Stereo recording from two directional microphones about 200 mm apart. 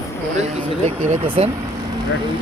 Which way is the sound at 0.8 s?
30° right (ahead or behind).